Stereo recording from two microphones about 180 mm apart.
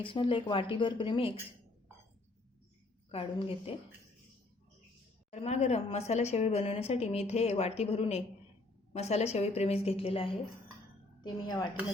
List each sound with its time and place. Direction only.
0.0 s speech: 30° left (ahead or behind)
3.1 s speech: 30° left (ahead or behind)
5.3 s a woman's voice: 40° left (ahead or behind)